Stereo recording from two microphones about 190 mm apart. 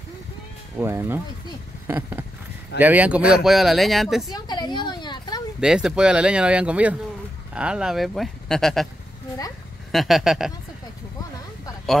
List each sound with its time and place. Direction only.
0.7 s speech: 10° right (ahead or behind)
4.3 s a sound: 20° left (ahead or behind)
5.6 s speech: 5° right (ahead or behind)
9.8 s speech: centre (ahead or behind)